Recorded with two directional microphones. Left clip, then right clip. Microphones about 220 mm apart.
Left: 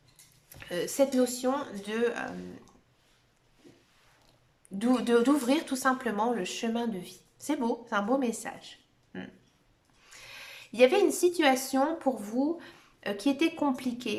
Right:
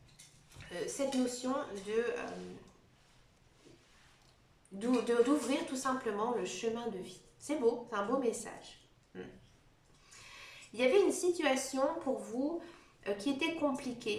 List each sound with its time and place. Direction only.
0.7 s speech: 50° left (ahead or behind)
4.8 s a woman's voice: 45° left (ahead or behind)